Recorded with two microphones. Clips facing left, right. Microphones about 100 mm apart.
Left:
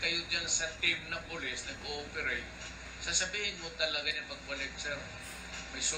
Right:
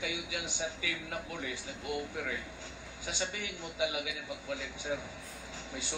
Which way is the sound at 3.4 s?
35° right (ahead or behind).